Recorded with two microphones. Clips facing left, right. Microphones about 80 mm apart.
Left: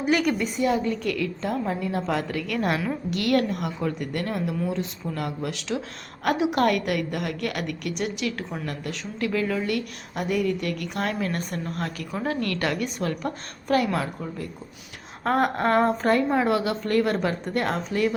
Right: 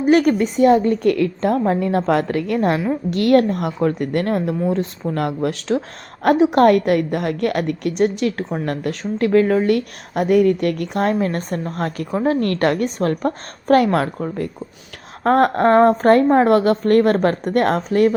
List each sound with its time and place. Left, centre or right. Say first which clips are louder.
0.0 s a woman's voice: right 8 dB; right
2.2 s a woman's voice: right 8 dB; right
10.8 s a woman's voice: right 8 dB; right
15.2 s a sound: right 8 dB; right
15.6 s a woman's voice: right 9 dB; right
15.9 s a woman's voice: right 9 dB; right